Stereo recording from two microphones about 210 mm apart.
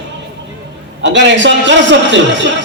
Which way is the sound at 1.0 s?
55° right (ahead or behind).